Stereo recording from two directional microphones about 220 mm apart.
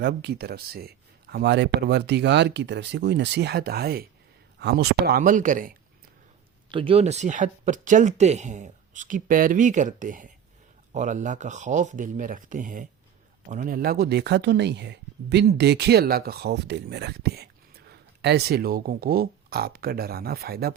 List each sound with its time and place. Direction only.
0.0 s speech: 50° right (ahead or behind)
6.7 s speech: 25° right (ahead or behind); by 20.7 s 45° right (ahead or behind)